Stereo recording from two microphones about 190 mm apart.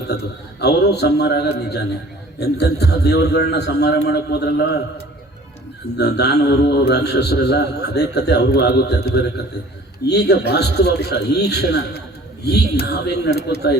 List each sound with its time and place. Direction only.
0.6 s a man's voice: 60° left (ahead or behind)
6.0 s a man's voice: 60° left (ahead or behind)